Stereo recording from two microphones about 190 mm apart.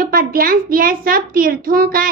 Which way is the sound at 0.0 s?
50° right (ahead or behind).